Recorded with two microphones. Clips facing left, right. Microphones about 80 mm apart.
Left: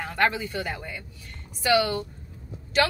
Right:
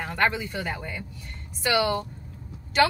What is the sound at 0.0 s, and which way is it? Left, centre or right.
Speech, centre.